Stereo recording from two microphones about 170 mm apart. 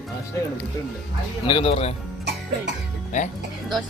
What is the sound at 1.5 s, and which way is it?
Speech, 30° left (ahead or behind).